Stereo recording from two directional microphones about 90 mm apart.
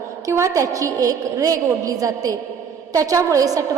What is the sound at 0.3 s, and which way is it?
A woman's voice, 35° right (ahead or behind).